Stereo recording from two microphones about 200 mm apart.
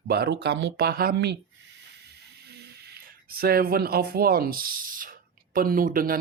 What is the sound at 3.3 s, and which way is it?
Speech, 50° right (ahead or behind).